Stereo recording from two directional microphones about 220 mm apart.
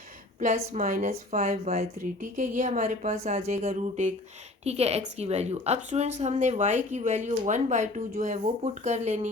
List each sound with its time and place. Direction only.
0.3 s speech: 35° right (ahead or behind)